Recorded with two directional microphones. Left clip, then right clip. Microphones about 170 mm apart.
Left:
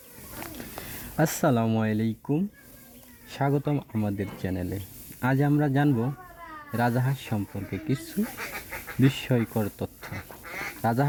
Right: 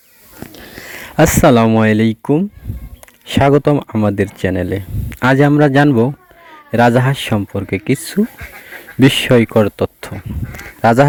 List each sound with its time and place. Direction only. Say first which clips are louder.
0.9 s speech: right 15 dB; 40° right (ahead or behind)